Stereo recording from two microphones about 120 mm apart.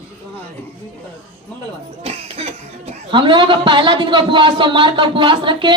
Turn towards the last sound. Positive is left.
turn(degrees=-40)  # may be behind; listen again after turning